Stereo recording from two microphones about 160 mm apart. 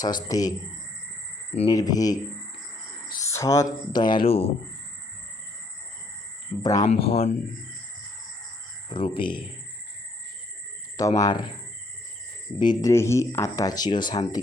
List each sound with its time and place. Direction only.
0.0 s speech: 25° left (ahead or behind)
1.7 s speech: 25° left (ahead or behind)
3.2 s speech: 20° left (ahead or behind); by 4.5 s 35° left (ahead or behind)
6.6 s speech: 20° left (ahead or behind)
7.0 s speech: 35° left (ahead or behind)
8.9 s speech: 30° left (ahead or behind)
10.9 s speech: 20° left (ahead or behind)
12.5 s speech: 30° left (ahead or behind)
12.9 s speech: 15° left (ahead or behind)